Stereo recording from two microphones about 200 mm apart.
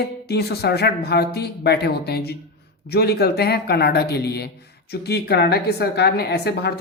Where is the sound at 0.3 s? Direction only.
55° left (ahead or behind).